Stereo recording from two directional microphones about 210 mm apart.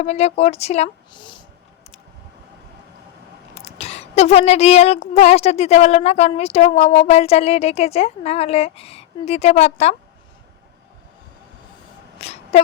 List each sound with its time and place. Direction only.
0.0 s a woman's voice: 30° left (ahead or behind)
3.5 s a woman's voice: 30° left (ahead or behind)
12.2 s a sound: 30° left (ahead or behind)